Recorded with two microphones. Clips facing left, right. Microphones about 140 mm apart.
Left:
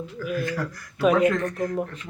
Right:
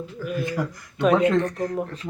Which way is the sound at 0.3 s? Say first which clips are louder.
Right 2 dB; 20° right (ahead or behind).